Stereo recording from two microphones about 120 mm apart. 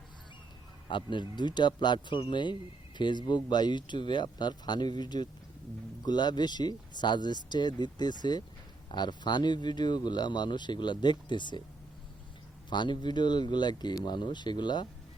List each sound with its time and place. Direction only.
0.9 s speech: 40° left (ahead or behind)
12.7 s speech: 40° left (ahead or behind)